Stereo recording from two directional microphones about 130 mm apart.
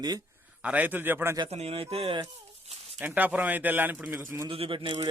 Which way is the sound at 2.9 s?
15° right (ahead or behind).